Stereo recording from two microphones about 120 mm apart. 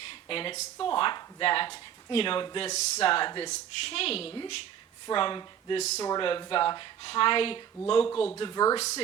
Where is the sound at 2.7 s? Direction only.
70° left (ahead or behind).